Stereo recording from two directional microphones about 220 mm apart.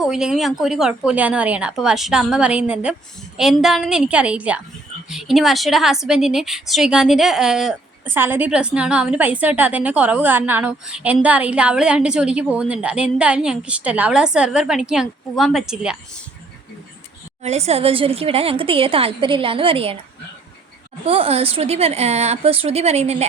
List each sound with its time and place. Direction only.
0.0 s a woman's voice: 5° right (ahead or behind)
17.4 s a woman's voice: 30° right (ahead or behind)
21.0 s a woman's voice: 25° right (ahead or behind)